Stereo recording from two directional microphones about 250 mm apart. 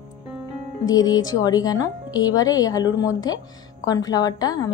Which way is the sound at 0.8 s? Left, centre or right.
Centre.